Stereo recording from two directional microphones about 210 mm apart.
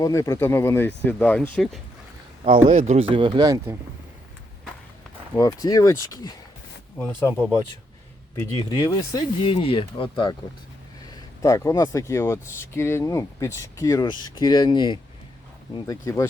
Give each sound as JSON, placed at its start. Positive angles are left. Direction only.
{"t": 0.0, "sound": "speech", "side_deg": 15}
{"t": 2.6, "sound": "speech", "side_deg": -35}
{"t": 5.3, "sound": "speech", "side_deg": 15}
{"t": 8.4, "sound": "speech", "side_deg": 15}